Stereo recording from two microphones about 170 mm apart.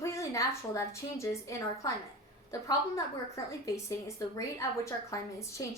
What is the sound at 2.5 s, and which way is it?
A woman's voice, 20° left (ahead or behind).